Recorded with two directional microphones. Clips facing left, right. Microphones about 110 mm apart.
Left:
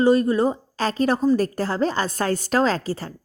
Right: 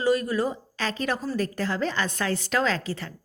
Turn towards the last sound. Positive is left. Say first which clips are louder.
# left 5 dB
turn(degrees=40)  # may be behind; listen again after turning